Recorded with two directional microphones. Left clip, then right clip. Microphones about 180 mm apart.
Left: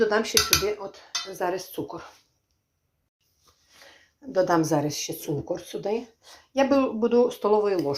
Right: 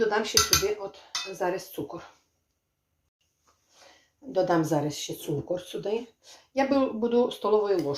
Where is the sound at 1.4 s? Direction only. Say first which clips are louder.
Left 1 dB; 30° left (ahead or behind).